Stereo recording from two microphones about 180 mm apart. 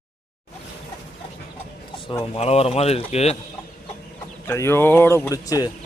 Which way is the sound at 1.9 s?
30° left (ahead or behind).